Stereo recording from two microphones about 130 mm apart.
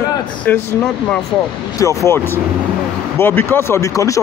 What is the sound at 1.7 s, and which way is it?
Speech, 25° left (ahead or behind).